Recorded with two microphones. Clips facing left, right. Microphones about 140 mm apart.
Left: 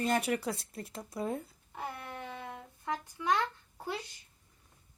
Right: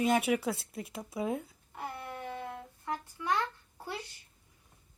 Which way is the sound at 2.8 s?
20° left (ahead or behind).